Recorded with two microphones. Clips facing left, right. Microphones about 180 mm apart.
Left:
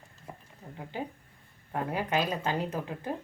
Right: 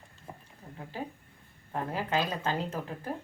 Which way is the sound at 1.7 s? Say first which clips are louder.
Left 1 dB; 15° left (ahead or behind).